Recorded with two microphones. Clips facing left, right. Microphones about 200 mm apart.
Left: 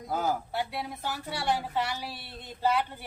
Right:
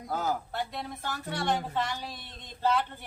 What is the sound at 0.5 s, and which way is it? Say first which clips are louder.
A man's voice: left 2 dB; 10° left (ahead or behind).